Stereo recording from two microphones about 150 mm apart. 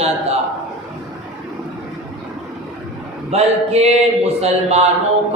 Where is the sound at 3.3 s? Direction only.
45° right (ahead or behind).